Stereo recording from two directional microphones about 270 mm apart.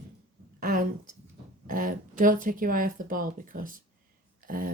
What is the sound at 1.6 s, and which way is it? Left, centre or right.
Speech, right.